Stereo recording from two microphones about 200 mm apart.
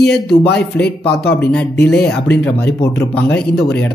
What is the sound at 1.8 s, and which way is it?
Speech, 55° left (ahead or behind).